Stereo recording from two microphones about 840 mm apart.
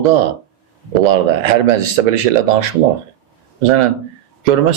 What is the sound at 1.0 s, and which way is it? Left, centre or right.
Speech, right.